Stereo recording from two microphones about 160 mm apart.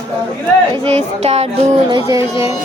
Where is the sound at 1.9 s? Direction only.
20° right (ahead or behind).